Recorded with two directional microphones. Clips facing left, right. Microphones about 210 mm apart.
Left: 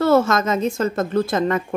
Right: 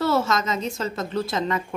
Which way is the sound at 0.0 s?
50° left (ahead or behind).